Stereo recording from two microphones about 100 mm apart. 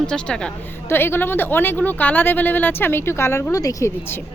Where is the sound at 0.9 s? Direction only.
20° left (ahead or behind).